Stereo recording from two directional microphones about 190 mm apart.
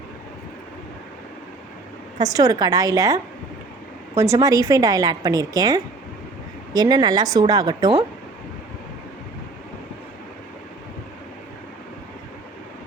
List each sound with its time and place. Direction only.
2.1 s a woman's voice: 20° right (ahead or behind)